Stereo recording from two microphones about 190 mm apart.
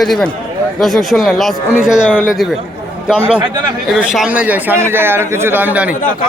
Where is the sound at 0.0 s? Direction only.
Centre (ahead or behind).